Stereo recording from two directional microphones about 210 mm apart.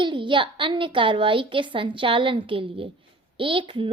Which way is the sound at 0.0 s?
25° right (ahead or behind).